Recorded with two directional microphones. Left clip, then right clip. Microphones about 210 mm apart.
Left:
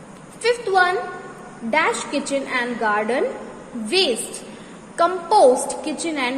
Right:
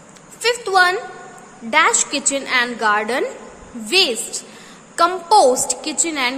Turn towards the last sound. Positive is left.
turn(degrees=-15)  # may be behind; listen again after turning